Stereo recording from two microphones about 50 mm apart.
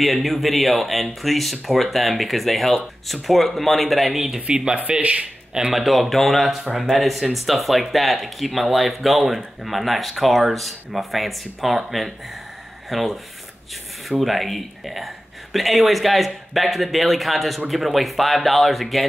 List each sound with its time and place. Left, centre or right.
0.0 s speech: centre
4.9 s speech: right
5.7 s speech: centre
14.2 s speech: centre